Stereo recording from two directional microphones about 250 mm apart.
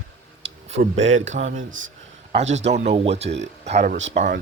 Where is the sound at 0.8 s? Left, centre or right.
Right.